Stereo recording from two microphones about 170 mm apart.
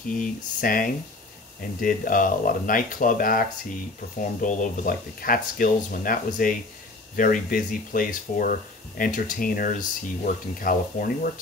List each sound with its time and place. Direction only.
0.2 s speech: 55° left (ahead or behind)